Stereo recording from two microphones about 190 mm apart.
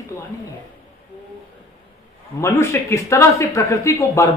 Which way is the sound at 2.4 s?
15° left (ahead or behind).